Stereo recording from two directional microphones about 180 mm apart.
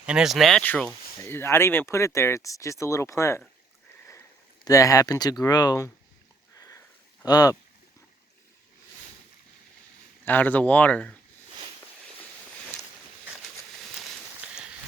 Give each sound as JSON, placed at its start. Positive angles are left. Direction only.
{"t": 0.0, "sound": "speech", "side_deg": -5}
{"t": 4.6, "sound": "speech", "side_deg": 20}
{"t": 6.6, "sound": "sniff", "side_deg": 20}
{"t": 7.3, "sound": "speech", "side_deg": 20}
{"t": 10.2, "sound": "speech", "side_deg": 10}